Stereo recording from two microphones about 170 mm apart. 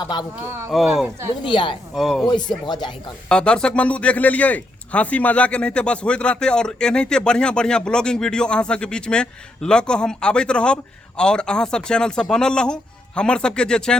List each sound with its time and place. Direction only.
0.0 s speech: 25° left (ahead or behind)
0.7 s speech: centre (ahead or behind)
1.4 s speech: 30° left (ahead or behind)
2.0 s speech: centre (ahead or behind)
2.2 s speech: 25° left (ahead or behind)
3.2 s speech: 5° left (ahead or behind)